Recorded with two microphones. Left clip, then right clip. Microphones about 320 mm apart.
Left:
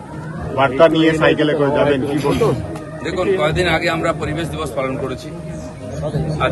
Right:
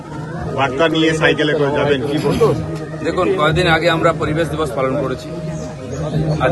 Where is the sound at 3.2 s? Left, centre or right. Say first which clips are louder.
Right 1 dB; centre.